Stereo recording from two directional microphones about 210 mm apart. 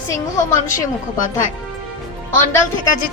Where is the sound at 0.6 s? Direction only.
35° left (ahead or behind).